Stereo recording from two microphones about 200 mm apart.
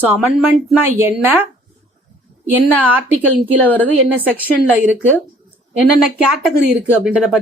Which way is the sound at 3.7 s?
10° left (ahead or behind).